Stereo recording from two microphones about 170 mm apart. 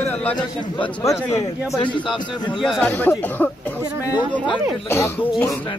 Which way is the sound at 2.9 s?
10° left (ahead or behind).